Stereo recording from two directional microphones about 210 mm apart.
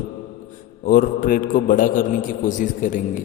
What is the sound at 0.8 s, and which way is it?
A man's voice, 40° left (ahead or behind).